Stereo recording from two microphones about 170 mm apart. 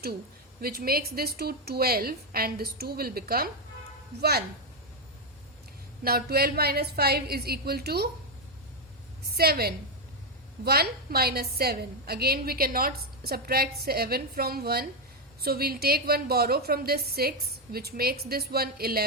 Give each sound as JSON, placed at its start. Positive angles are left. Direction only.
{"t": 0.6, "sound": "a woman's voice", "side_deg": -65}
{"t": 6.0, "sound": "a woman's voice", "side_deg": -65}
{"t": 9.3, "sound": "a woman's voice", "side_deg": -65}